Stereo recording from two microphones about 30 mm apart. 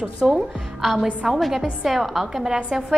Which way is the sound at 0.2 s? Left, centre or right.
Centre.